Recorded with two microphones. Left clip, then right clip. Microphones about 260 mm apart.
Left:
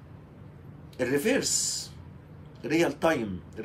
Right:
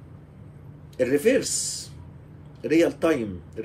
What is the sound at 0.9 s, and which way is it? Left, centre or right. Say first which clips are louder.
A man's voice: right 6 dB; centre.